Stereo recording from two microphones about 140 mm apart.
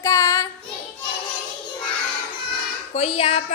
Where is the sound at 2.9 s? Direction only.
45° left (ahead or behind).